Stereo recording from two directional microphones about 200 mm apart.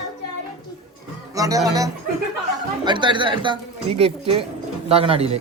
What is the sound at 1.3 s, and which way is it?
Speech, 15° right (ahead or behind).